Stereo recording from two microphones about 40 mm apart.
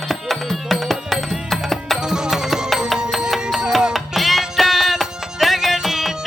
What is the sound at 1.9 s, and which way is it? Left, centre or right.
Music, centre.